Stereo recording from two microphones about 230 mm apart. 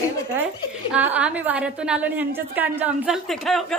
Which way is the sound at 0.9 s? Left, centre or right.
Centre.